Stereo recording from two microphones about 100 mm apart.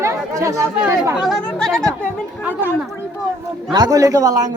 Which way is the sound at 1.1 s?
5° right (ahead or behind).